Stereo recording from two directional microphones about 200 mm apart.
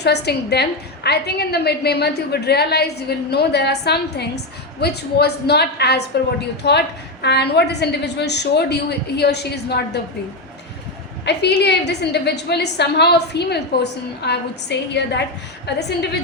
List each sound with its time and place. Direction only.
0.0 s a woman's voice: 55° left (ahead or behind)
11.3 s a woman's voice: 60° left (ahead or behind)